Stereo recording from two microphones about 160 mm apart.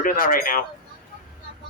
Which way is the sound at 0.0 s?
65° left (ahead or behind).